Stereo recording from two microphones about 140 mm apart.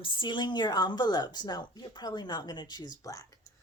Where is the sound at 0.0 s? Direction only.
35° left (ahead or behind).